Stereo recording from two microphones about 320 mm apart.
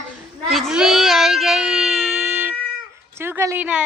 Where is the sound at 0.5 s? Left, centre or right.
Centre.